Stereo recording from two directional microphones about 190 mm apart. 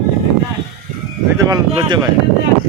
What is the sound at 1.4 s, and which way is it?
Speech, 20° right (ahead or behind).